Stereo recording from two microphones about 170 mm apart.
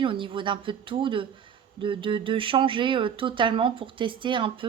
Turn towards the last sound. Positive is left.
turn(degrees=-30)  # may be behind; listen again after turning